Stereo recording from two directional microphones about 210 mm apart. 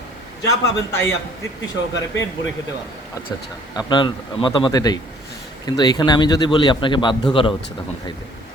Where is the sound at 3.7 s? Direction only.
20° left (ahead or behind).